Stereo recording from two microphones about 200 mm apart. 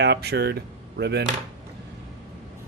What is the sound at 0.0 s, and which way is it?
Speech, 55° right (ahead or behind).